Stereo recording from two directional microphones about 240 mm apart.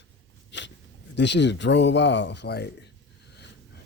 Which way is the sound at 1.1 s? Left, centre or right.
Left.